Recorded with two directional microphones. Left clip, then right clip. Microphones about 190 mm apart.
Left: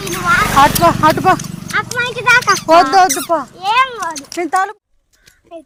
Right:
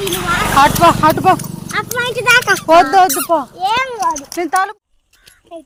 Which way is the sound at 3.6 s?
20° left (ahead or behind).